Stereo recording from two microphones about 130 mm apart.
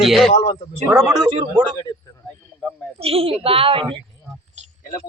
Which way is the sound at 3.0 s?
50° right (ahead or behind).